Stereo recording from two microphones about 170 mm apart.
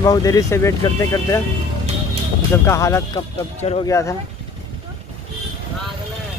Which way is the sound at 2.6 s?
15° left (ahead or behind).